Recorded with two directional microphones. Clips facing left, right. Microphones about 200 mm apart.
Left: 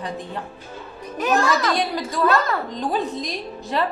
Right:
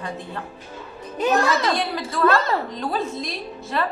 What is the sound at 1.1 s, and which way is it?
Speech, 25° right (ahead or behind).